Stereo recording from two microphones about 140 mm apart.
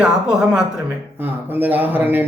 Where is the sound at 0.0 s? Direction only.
5° right (ahead or behind).